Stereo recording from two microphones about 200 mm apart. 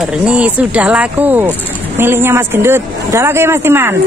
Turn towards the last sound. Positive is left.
turn(degrees=-10)  # may be behind; listen again after turning